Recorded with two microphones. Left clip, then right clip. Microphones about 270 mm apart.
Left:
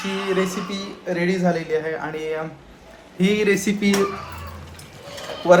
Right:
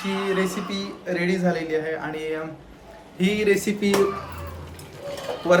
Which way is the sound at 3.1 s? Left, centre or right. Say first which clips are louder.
Left 2 dB; centre.